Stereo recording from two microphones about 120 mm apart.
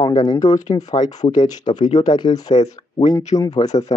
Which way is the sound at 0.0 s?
35° left (ahead or behind).